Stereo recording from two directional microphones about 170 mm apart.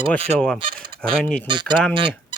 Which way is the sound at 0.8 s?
30° right (ahead or behind).